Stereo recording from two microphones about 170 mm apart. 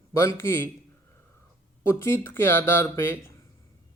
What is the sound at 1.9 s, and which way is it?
A man's voice, 15° left (ahead or behind).